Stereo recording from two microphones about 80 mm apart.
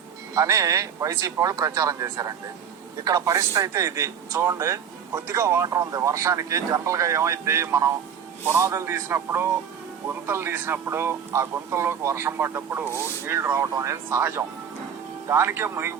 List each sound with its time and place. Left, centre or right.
0.3 s speech: right
5.6 s speech: right